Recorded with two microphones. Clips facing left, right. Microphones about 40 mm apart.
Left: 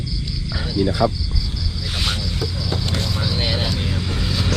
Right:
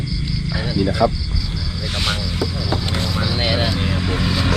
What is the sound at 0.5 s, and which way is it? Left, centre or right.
Speech, right.